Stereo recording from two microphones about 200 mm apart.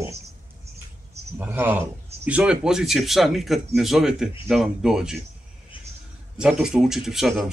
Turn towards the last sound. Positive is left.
turn(degrees=0)  # may be behind; listen again after turning